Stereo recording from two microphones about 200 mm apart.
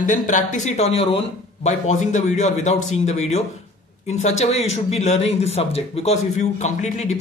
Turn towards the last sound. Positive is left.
turn(degrees=35)  # may be behind; listen again after turning